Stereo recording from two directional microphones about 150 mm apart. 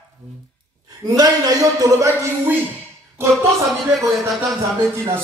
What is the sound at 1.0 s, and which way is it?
A man's voice, 25° right (ahead or behind).